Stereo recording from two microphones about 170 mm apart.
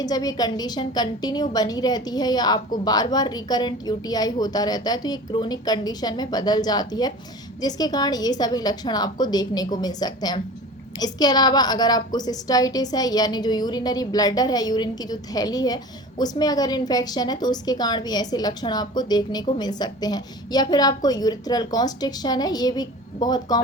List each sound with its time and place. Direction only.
0.0 s a woman's voice: 25° left (ahead or behind)